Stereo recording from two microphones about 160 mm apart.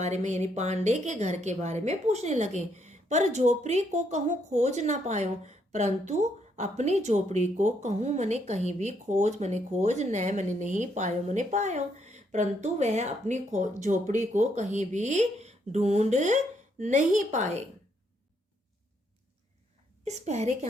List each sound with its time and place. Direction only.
0.0 s a woman's voice: 45° right (ahead or behind)
20.1 s a woman's voice: 45° right (ahead or behind)